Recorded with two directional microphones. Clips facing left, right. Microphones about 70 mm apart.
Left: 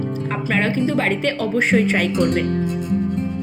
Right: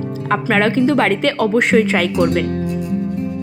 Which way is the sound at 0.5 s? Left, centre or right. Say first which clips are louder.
Right 4 dB; right.